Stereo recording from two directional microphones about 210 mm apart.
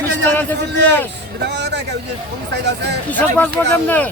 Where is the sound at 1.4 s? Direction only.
55° right (ahead or behind).